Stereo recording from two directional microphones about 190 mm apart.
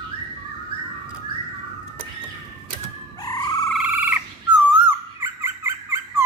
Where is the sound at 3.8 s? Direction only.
10° right (ahead or behind).